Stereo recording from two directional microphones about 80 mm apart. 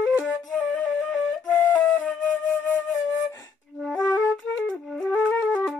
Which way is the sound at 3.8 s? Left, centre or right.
Centre.